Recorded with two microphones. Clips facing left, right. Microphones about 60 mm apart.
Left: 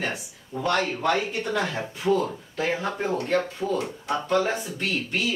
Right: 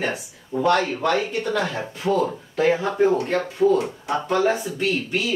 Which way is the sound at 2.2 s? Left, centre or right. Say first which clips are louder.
Right 7 dB; centre.